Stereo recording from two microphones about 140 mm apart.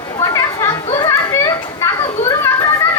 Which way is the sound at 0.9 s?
25° left (ahead or behind).